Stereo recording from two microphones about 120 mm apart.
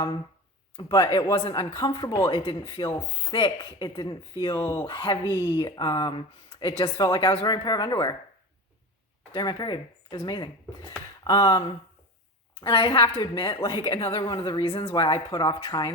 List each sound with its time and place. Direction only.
0.8 s speech: 40° left (ahead or behind)
9.3 s speech: 35° left (ahead or behind)
14.2 s speech: 40° left (ahead or behind)